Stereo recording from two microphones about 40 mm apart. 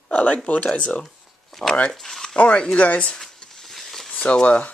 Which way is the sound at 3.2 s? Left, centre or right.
Centre.